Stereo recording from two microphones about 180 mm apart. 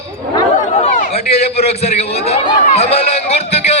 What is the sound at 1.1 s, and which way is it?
A man's voice, 35° left (ahead or behind).